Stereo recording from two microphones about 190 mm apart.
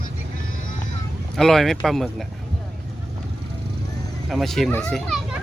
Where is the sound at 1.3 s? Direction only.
Centre (ahead or behind).